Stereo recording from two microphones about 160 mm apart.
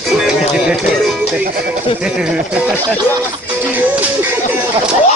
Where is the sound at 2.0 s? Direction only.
5° right (ahead or behind).